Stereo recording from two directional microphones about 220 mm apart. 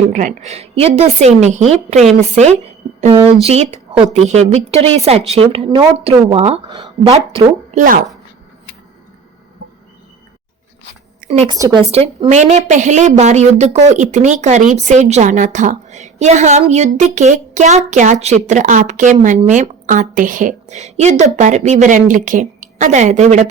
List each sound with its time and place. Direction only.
0.1 s a woman's voice: 35° right (ahead or behind)
11.2 s a sound: 30° right (ahead or behind)
11.4 s a woman's voice: 15° right (ahead or behind)